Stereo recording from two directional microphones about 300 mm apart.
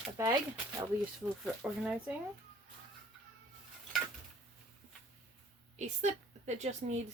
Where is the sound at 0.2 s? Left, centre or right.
Centre.